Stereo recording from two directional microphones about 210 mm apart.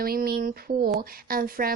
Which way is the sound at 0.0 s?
45° right (ahead or behind).